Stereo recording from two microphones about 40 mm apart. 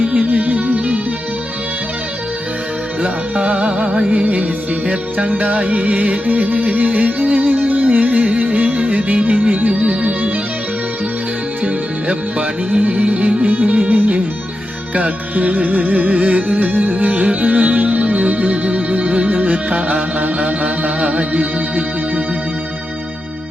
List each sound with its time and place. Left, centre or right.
0.0 s music: right
3.0 s music: right
11.6 s music: right